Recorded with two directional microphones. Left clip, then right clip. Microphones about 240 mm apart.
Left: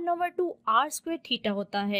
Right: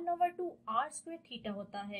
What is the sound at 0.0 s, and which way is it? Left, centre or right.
A woman's voice, left.